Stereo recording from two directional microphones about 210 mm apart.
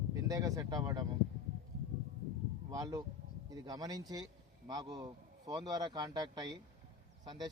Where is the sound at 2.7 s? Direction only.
15° right (ahead or behind).